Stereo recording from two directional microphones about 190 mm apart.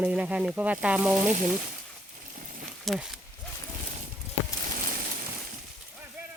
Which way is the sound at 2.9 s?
Centre (ahead or behind).